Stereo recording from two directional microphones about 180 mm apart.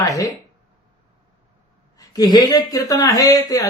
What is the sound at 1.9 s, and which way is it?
Speech, 20° left (ahead or behind).